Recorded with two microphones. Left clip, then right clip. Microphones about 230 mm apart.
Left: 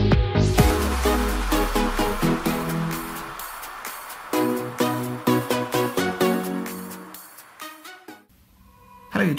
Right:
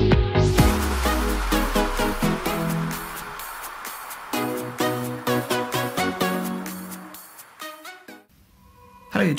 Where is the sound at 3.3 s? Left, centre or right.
Centre.